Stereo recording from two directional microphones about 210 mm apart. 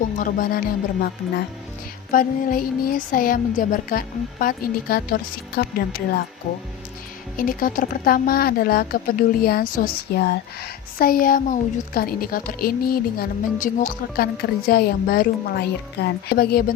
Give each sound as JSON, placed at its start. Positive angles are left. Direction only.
{"t": 0.2, "sound": "music", "side_deg": 40}
{"t": 2.1, "sound": "speech", "side_deg": 40}
{"t": 7.3, "sound": "speech", "side_deg": 40}